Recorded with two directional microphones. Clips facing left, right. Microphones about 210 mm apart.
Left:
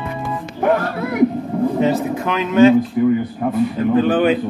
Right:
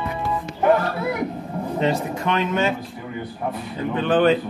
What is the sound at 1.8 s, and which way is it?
Speech, centre (ahead or behind).